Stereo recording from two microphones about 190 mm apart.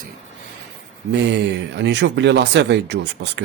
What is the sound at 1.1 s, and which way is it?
Speech, 65° right (ahead or behind).